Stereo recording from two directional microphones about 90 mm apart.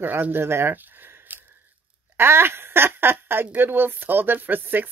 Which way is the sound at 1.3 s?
20° right (ahead or behind).